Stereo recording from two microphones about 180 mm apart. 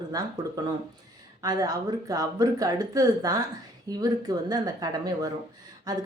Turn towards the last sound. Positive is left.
turn(degrees=-20)  # may be behind; listen again after turning